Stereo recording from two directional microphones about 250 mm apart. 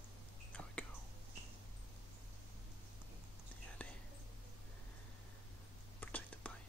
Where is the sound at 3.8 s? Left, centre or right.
Centre.